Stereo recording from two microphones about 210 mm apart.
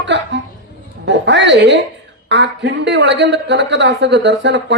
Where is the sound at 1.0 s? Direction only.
55° right (ahead or behind).